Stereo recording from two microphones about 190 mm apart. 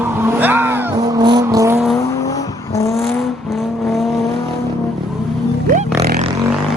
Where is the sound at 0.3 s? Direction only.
10° right (ahead or behind).